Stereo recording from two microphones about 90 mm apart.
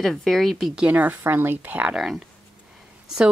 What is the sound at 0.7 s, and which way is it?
Speech, 15° right (ahead or behind).